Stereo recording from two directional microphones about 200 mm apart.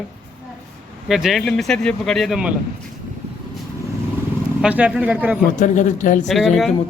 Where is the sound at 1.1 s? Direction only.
Centre (ahead or behind).